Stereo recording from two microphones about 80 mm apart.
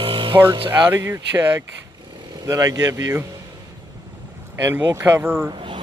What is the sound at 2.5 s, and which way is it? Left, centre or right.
Speech, right.